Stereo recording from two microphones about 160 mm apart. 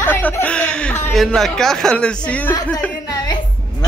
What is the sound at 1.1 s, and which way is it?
Speech, centre (ahead or behind).